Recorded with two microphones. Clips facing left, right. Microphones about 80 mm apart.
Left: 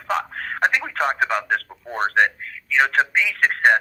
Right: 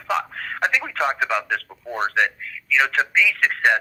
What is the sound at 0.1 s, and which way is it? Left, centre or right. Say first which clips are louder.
Telephone: even; left.